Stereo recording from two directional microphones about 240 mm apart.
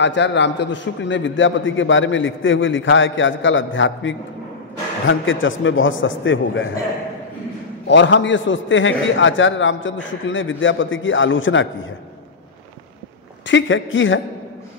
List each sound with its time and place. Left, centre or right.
0.0 s a man's voice: left
7.9 s a man's voice: left
13.5 s a man's voice: left